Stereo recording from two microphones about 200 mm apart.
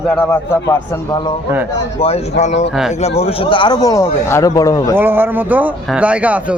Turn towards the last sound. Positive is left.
turn(degrees=-5)  # may be behind; listen again after turning